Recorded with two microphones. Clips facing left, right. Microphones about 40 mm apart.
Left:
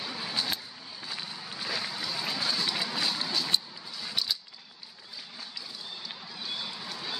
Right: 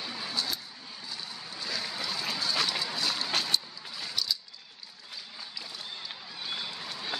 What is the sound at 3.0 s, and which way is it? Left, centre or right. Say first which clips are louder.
Vehicle: left 1 dB; left.